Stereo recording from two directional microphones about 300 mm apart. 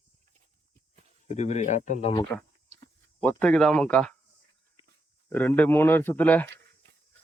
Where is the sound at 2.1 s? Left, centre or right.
Centre.